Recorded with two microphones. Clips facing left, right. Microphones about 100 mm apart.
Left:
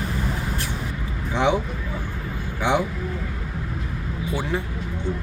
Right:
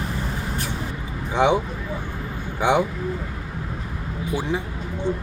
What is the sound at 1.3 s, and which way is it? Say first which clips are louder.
Speech: right 2 dB; 20° right (ahead or behind).